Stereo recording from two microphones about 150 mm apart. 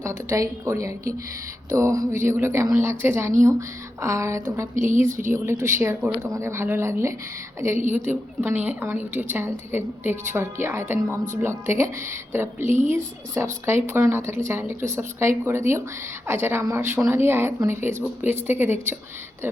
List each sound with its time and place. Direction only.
0.0 s a woman's voice: 20° right (ahead or behind)
4.7 s a woman's voice: 60° right (ahead or behind)
5.3 s a woman's voice: 15° right (ahead or behind)